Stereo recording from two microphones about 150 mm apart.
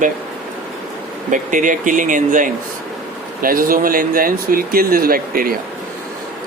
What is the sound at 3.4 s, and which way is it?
Speech, 70° right (ahead or behind).